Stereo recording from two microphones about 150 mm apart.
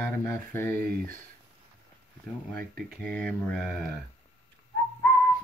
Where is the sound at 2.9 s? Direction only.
5° left (ahead or behind).